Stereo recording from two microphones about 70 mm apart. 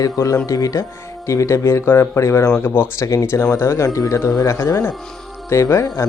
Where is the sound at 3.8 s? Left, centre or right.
Left.